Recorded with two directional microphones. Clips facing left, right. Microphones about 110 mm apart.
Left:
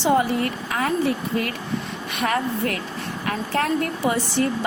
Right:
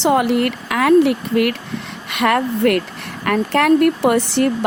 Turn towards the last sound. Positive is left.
turn(degrees=-65)  # may be behind; listen again after turning